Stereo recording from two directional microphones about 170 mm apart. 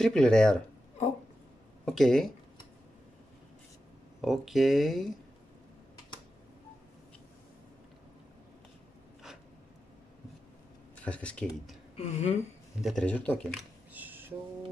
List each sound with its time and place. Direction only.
0.0 s speech: 5° left (ahead or behind)
1.9 s speech: 5° left (ahead or behind)
4.2 s speech: centre (ahead or behind)
11.0 s speech: 10° left (ahead or behind)
12.0 s speech: 40° left (ahead or behind)
12.8 s speech: 5° left (ahead or behind)
13.9 s a sound: 10° right (ahead or behind)